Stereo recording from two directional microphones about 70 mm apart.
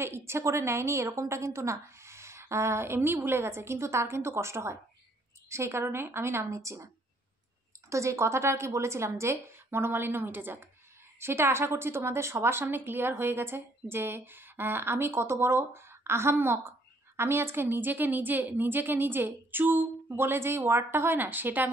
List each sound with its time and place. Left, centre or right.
0.0 s a woman's voice: right
7.9 s a woman's voice: right